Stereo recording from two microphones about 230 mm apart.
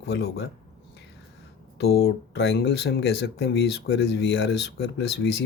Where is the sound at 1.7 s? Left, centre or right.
Left.